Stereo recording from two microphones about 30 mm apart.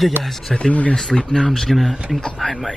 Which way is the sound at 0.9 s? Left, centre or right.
Left.